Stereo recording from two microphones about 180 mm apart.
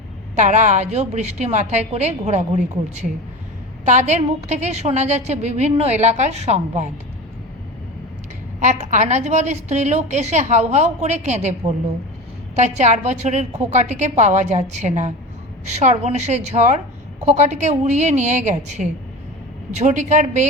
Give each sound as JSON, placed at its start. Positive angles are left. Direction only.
{"t": 0.3, "sound": "a woman's voice", "side_deg": -40}
{"t": 8.6, "sound": "a woman's voice", "side_deg": -40}
{"t": 12.5, "sound": "a woman's voice", "side_deg": -40}